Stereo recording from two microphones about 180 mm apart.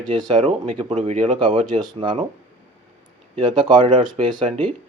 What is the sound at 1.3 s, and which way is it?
Speech, 25° right (ahead or behind).